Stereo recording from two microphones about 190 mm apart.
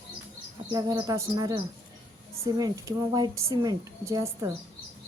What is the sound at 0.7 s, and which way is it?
A woman's voice, 20° right (ahead or behind).